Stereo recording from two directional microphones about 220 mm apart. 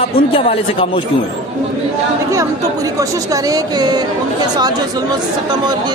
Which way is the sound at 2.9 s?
15° right (ahead or behind).